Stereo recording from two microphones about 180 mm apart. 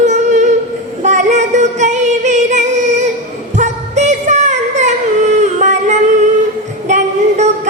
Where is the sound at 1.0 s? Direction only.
40° right (ahead or behind).